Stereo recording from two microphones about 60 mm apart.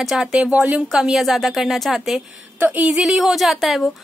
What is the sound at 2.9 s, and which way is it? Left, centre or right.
Speech, centre.